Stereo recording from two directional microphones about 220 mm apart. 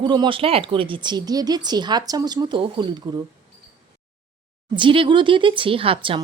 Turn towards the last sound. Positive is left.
turn(degrees=-25)  # may be behind; listen again after turning